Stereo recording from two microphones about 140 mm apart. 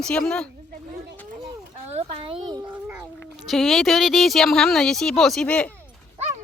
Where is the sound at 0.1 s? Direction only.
5° left (ahead or behind).